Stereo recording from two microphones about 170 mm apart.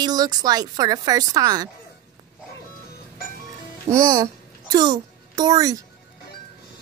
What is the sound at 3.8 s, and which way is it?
A child's voice, 20° right (ahead or behind).